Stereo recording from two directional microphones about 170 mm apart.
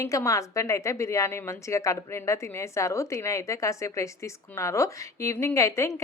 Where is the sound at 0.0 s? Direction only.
20° left (ahead or behind).